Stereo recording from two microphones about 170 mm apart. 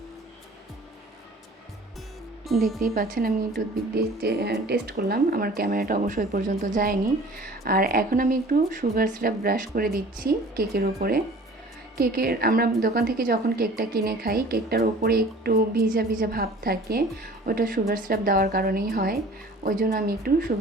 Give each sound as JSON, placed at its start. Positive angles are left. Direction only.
{"t": 2.5, "sound": "speech", "side_deg": 0}
{"t": 2.8, "sound": "a woman's voice", "side_deg": -60}